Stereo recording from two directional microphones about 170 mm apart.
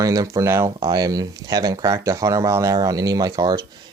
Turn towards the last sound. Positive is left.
turn(degrees=-20)  # may be behind; listen again after turning